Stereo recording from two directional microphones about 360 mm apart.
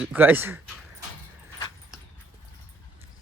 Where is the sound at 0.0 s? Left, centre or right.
Centre.